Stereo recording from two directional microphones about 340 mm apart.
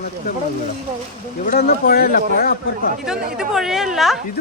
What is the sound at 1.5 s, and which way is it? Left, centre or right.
Speech, left.